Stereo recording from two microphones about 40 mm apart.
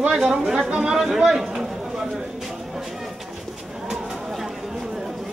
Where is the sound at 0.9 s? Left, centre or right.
Centre.